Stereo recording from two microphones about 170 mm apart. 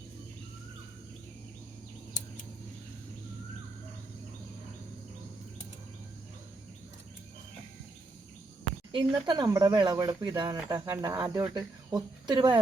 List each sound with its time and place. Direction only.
8.9 s speech: 30° right (ahead or behind)